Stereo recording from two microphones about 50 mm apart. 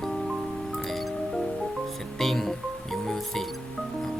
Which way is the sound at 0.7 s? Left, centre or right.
Centre.